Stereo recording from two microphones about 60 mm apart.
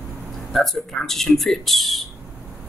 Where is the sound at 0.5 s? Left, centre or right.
Centre.